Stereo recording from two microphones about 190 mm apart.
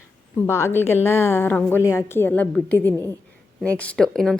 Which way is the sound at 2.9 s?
15° right (ahead or behind).